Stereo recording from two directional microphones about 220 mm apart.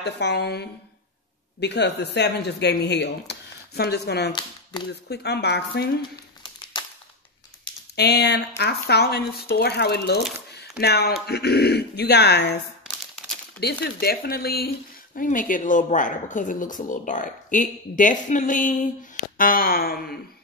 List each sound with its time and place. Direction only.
0.0 s speech: 50° left (ahead or behind)
4.3 s speech: 20° left (ahead or behind)
5.1 s speech: 50° left (ahead or behind)
6.4 s crumpling: 20° left (ahead or behind)
7.9 s speech: 50° left (ahead or behind)
13.6 s speech: 45° left (ahead or behind)